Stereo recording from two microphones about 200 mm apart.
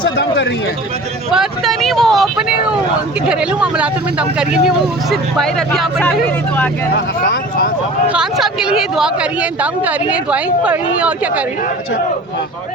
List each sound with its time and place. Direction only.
0.0 s speech: 60° left (ahead or behind)
1.3 s speech: centre (ahead or behind)
6.9 s speech: 50° left (ahead or behind)
8.1 s speech: 5° right (ahead or behind)